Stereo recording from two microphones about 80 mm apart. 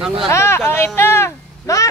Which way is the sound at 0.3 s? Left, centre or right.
Left.